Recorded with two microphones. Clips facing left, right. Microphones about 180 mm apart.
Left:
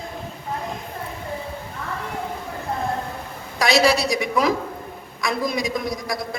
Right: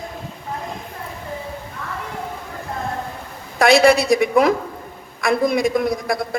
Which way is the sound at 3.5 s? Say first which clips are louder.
Right 5 dB; 55° right (ahead or behind).